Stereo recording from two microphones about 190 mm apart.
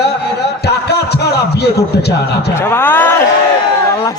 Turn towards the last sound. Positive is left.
turn(degrees=10)  # may be behind; listen again after turning